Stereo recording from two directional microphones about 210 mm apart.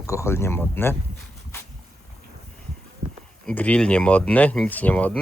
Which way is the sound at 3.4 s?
5° left (ahead or behind).